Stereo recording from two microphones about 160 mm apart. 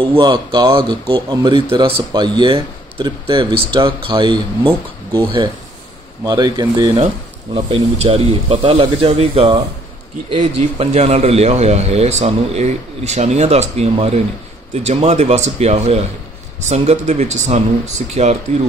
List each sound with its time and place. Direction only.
0.0 s speech: 30° right (ahead or behind)
6.2 s speech: 25° right (ahead or behind); by 18.4 s 45° right (ahead or behind)